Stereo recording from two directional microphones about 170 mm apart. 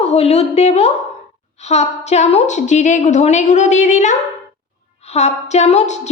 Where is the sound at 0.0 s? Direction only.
40° left (ahead or behind).